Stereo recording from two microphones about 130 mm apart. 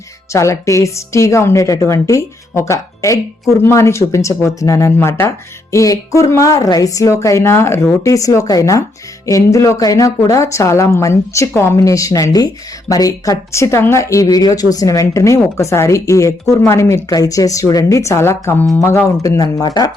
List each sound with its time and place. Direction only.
0.3 s speech: 25° left (ahead or behind)